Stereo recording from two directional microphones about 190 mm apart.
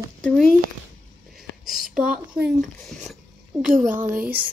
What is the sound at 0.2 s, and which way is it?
Speech, 5° left (ahead or behind).